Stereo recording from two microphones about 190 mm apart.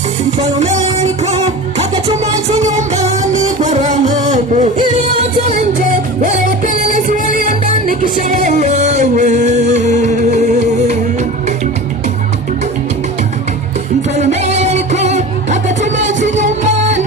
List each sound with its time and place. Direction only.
0.3 s music: 35° right (ahead or behind)
6.8 s music: 45° right (ahead or behind)
14.2 s music: 35° right (ahead or behind)